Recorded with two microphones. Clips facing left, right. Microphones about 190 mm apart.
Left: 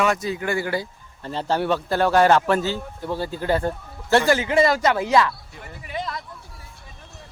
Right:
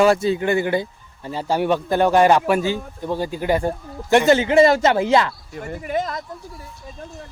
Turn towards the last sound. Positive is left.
turn(degrees=-45)  # may be behind; listen again after turning